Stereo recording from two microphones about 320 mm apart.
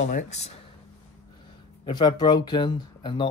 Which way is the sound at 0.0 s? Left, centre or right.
Left.